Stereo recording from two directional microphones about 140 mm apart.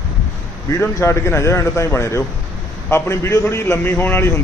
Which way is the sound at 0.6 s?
20° left (ahead or behind).